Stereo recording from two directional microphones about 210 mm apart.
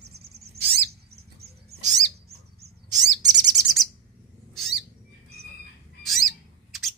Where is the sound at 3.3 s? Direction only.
35° right (ahead or behind).